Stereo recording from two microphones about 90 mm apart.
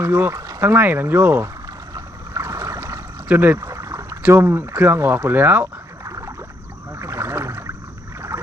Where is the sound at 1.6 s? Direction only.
40° right (ahead or behind).